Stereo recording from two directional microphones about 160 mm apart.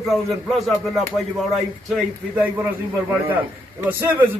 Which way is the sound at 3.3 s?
15° right (ahead or behind).